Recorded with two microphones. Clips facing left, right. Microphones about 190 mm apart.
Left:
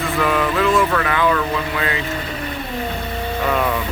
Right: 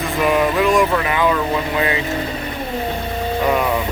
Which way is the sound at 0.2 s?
20° right (ahead or behind).